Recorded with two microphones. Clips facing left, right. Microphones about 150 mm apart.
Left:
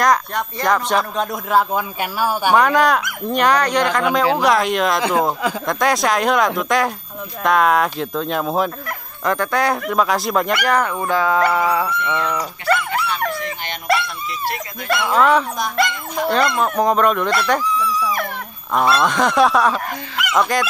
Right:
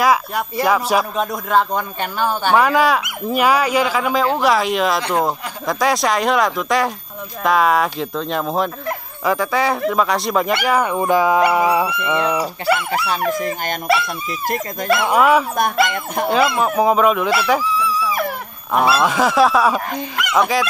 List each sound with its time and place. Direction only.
0.0 s speech: 5° right (ahead or behind)
2.5 s speech: 5° right (ahead or behind)
10.9 s speech: 15° right (ahead or behind)
13.3 s speech: 45° right (ahead or behind)
15.0 s speech: 10° right (ahead or behind)